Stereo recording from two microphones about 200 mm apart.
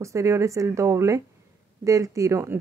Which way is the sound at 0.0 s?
15° right (ahead or behind).